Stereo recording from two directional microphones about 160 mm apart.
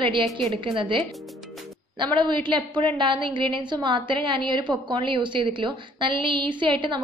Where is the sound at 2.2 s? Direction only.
30° right (ahead or behind).